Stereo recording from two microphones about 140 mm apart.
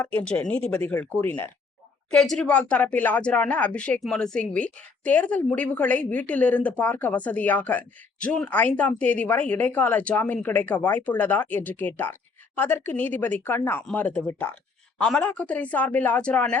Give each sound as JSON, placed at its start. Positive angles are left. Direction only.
{"t": 0.2, "sound": "speech", "side_deg": 10}